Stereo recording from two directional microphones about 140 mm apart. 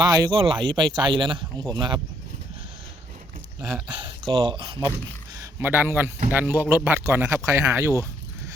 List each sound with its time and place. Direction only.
0.0 s speech: 30° right (ahead or behind)
3.9 s speech: 35° right (ahead or behind)
5.5 s speech: 15° right (ahead or behind)